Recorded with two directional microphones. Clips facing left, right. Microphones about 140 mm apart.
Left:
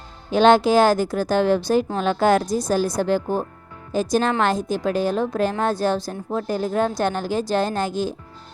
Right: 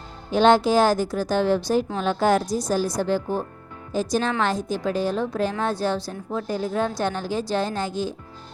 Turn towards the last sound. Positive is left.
turn(degrees=50)  # may be behind; listen again after turning